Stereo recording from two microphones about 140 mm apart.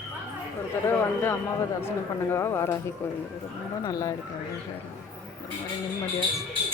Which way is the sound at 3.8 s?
25° left (ahead or behind).